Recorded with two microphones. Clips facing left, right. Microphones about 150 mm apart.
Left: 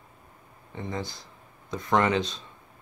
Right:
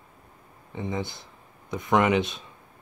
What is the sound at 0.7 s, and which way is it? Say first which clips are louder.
Speech: right 3 dB; 20° right (ahead or behind).